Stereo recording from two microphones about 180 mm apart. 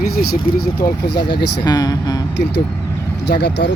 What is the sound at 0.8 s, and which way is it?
Speech, 25° left (ahead or behind).